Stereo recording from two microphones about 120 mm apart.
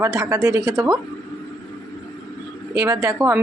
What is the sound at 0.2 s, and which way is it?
Speech, 30° right (ahead or behind).